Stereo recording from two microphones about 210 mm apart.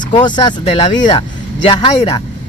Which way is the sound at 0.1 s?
20° left (ahead or behind).